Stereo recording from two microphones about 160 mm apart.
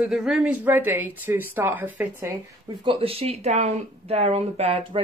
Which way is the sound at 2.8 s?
35° right (ahead or behind).